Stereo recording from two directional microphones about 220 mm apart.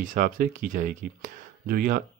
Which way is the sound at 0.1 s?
35° right (ahead or behind).